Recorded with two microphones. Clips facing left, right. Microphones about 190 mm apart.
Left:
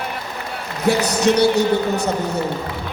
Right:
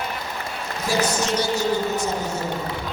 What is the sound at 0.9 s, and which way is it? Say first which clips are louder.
A man's voice: left 6 dB; 65° left (ahead or behind).